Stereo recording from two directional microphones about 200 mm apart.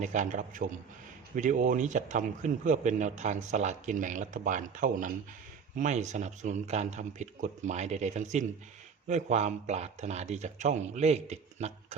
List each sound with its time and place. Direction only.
0.0 s speech: 40° right (ahead or behind)